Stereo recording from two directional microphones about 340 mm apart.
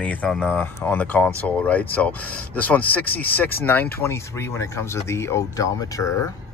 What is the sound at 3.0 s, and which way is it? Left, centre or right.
Speech, left.